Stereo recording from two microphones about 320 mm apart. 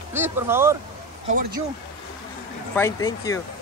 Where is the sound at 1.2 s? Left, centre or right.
Right.